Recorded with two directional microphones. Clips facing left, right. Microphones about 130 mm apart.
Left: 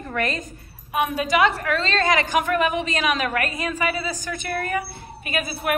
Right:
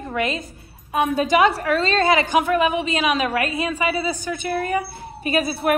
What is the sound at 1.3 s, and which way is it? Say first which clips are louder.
Speech: right 2 dB; 40° right (ahead or behind).